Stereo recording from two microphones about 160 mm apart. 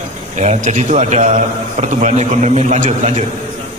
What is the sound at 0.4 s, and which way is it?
A man's voice, 45° right (ahead or behind).